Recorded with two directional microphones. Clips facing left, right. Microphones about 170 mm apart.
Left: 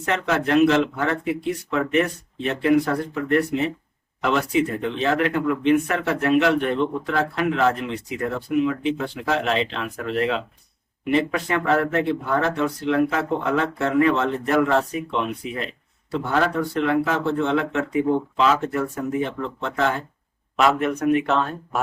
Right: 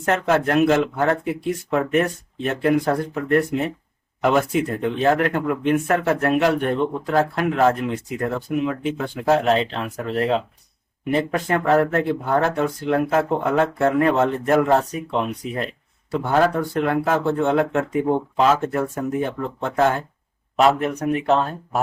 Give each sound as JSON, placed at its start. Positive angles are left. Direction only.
{"t": 0.0, "sound": "speech", "side_deg": -45}
{"t": 20.6, "sound": "speech", "side_deg": -35}